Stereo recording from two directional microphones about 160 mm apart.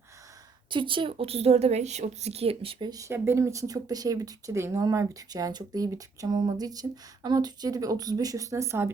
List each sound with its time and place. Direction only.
0.7 s a woman's voice: 30° right (ahead or behind)
2.9 s speech: 15° right (ahead or behind)